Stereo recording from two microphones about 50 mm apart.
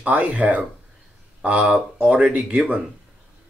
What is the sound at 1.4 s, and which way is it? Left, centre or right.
A man's voice, right.